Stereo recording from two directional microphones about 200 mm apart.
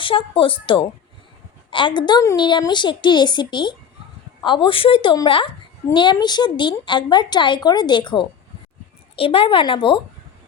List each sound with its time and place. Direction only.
0.0 s a woman's voice: 25° left (ahead or behind)